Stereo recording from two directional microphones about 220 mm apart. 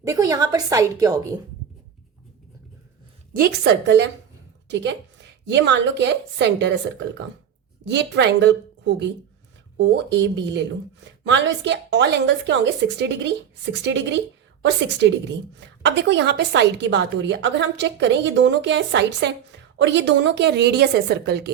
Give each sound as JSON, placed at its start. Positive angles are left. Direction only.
{"t": 0.0, "sound": "a woman's voice", "side_deg": -15}
{"t": 3.3, "sound": "a woman's voice", "side_deg": -45}
{"t": 7.9, "sound": "a woman's voice", "side_deg": -50}